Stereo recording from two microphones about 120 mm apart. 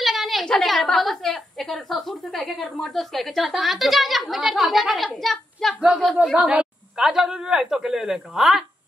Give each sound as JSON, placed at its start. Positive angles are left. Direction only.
{"t": 0.0, "sound": "a woman's voice", "side_deg": 0}